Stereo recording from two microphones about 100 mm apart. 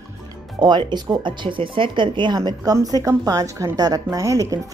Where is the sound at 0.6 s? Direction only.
50° right (ahead or behind).